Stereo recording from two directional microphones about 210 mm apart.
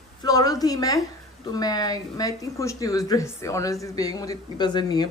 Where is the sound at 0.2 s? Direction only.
15° left (ahead or behind).